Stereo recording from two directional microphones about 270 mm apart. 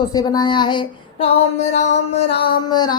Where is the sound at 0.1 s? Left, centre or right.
Centre.